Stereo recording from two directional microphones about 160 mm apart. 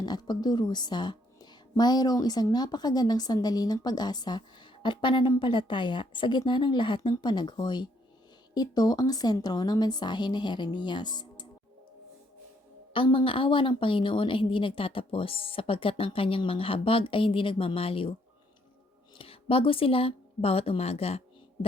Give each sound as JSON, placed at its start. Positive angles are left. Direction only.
{"t": 0.0, "sound": "a woman's voice", "side_deg": 25}
{"t": 12.9, "sound": "a woman's voice", "side_deg": 35}
{"t": 19.1, "sound": "speech", "side_deg": 35}